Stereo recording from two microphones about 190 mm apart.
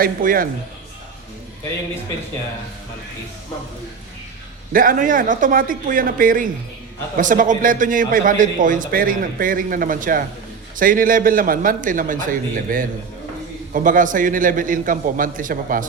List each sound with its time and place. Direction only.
0.0 s a man's voice: 45° right (ahead or behind)
4.7 s a man's voice: 45° right (ahead or behind)